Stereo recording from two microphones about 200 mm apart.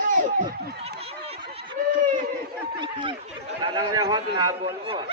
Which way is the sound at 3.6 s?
20° right (ahead or behind).